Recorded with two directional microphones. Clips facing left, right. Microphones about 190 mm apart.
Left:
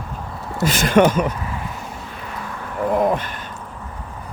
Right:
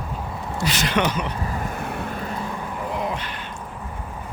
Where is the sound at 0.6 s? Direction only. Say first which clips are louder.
Left 8 dB; 45° left (ahead or behind).